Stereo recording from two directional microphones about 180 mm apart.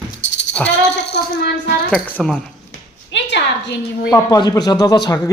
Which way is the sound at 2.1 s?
Centre (ahead or behind).